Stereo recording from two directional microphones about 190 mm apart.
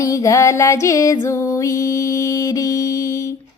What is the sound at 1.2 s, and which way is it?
Mantra, 15° left (ahead or behind).